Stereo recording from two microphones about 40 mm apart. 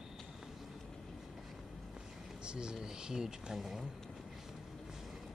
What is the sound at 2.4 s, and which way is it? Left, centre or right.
Speech, right.